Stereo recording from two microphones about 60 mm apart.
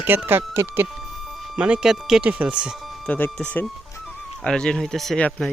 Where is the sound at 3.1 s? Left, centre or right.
Left.